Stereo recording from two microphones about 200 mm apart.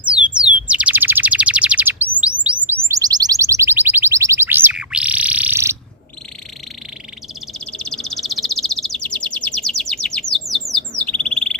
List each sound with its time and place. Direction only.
0.1 s bird: 5° right (ahead or behind)
2.2 s a sound: 5° right (ahead or behind)
7.7 s bird vocalization: 5° left (ahead or behind)
10.5 s bird: 5° left (ahead or behind)